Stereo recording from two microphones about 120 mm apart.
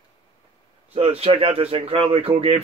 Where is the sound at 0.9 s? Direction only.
55° right (ahead or behind).